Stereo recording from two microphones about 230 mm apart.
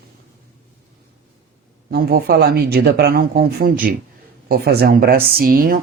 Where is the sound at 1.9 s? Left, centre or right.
Right.